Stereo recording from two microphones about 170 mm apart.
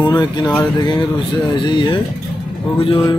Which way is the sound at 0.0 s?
25° left (ahead or behind).